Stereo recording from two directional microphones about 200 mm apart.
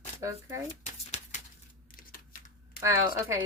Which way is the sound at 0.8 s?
35° left (ahead or behind).